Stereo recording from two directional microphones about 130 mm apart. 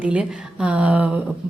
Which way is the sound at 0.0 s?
10° right (ahead or behind).